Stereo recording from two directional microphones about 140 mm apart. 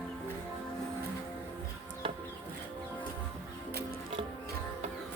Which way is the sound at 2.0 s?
40° right (ahead or behind).